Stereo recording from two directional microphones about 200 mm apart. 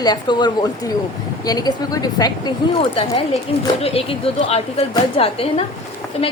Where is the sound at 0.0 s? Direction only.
20° left (ahead or behind).